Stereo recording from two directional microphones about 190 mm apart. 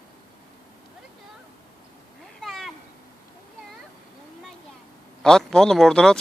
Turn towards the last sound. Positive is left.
turn(degrees=5)  # may be behind; listen again after turning